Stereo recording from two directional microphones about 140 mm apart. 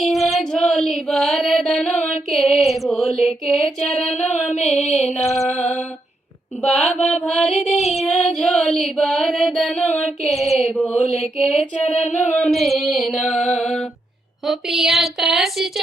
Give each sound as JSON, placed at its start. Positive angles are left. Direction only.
{"t": 0.0, "sound": "mantra", "side_deg": 0}
{"t": 4.2, "sound": "a sound", "side_deg": 55}
{"t": 5.1, "sound": "music", "side_deg": 0}
{"t": 6.6, "sound": "music", "side_deg": 5}
{"t": 12.0, "sound": "singing", "side_deg": 55}
{"t": 12.3, "sound": "music", "side_deg": 5}